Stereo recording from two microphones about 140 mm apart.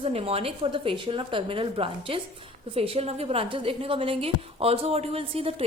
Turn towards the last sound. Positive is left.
turn(degrees=-45)  # may be behind; listen again after turning